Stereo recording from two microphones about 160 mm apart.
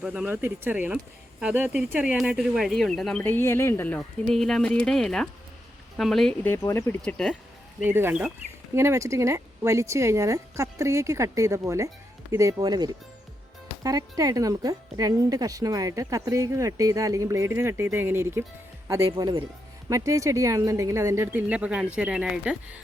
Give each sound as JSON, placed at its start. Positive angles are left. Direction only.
{"t": 0.0, "sound": "speech", "side_deg": -5}
{"t": 6.6, "sound": "speech", "side_deg": 15}
{"t": 7.8, "sound": "speech", "side_deg": -15}
{"t": 19.1, "sound": "speech", "side_deg": -30}
{"t": 19.9, "sound": "speech", "side_deg": -20}